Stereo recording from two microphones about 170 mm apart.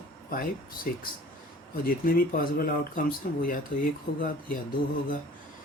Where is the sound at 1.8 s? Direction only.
55° left (ahead or behind).